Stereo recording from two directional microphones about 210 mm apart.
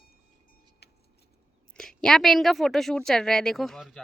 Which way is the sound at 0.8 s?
50° left (ahead or behind).